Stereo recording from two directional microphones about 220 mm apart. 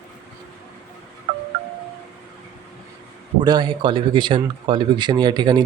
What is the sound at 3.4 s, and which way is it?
Speech, 20° right (ahead or behind).